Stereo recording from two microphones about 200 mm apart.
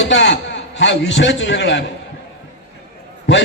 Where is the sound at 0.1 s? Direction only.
60° left (ahead or behind).